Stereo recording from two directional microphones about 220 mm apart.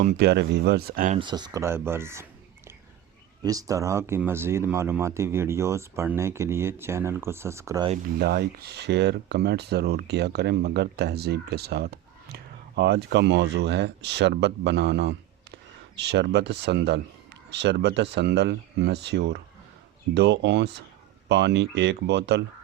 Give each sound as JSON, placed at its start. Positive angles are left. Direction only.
{"t": 0.0, "sound": "speech", "side_deg": -40}
{"t": 1.2, "sound": "speech", "side_deg": -20}
{"t": 3.4, "sound": "speech", "side_deg": -15}
{"t": 8.2, "sound": "speech", "side_deg": -45}